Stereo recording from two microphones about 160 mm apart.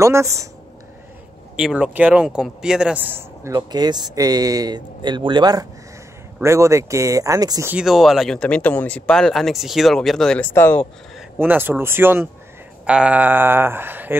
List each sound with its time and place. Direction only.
0.0 s speech: 20° right (ahead or behind)
1.6 s a man's voice: 5° right (ahead or behind)
3.5 s speech: 25° right (ahead or behind)
7.7 s speech: centre (ahead or behind)
11.3 s a man's voice: 15° right (ahead or behind)